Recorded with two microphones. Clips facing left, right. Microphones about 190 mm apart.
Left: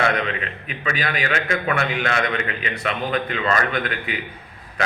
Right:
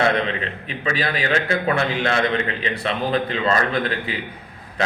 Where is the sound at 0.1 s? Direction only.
30° right (ahead or behind).